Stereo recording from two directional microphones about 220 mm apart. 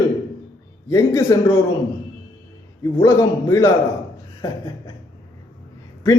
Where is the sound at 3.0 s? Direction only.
15° left (ahead or behind).